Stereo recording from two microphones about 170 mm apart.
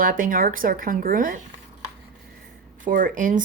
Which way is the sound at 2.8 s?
50° right (ahead or behind).